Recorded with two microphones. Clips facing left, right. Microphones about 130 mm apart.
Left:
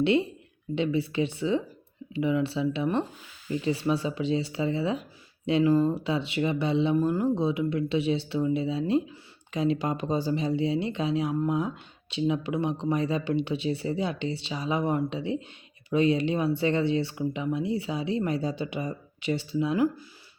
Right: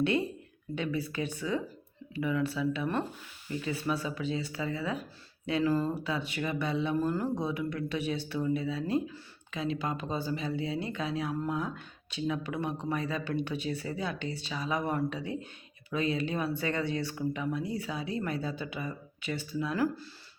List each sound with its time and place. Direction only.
0.8 s speech: 25° left (ahead or behind)
11.3 s speech: 15° left (ahead or behind); by 19.5 s 30° left (ahead or behind)
19.7 s speech: 20° left (ahead or behind)